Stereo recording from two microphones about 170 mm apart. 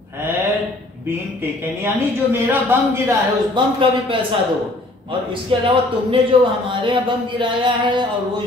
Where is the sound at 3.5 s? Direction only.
30° right (ahead or behind).